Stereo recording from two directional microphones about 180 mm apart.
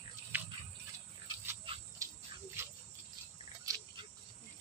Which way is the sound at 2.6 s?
15° right (ahead or behind).